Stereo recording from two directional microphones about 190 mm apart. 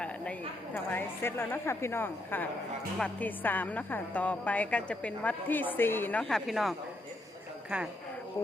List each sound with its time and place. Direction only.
0.0 s a woman's voice: 5° left (ahead or behind)